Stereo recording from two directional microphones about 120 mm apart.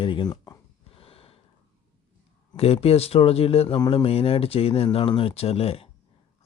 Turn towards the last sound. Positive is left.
turn(degrees=55)  # may be behind; listen again after turning